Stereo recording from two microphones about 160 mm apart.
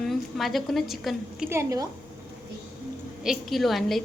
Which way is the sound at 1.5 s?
20° right (ahead or behind).